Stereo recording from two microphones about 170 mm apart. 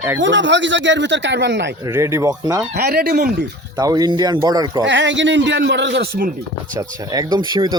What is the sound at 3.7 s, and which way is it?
Speech, 20° right (ahead or behind).